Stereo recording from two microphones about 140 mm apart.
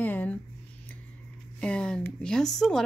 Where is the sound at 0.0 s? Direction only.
10° left (ahead or behind).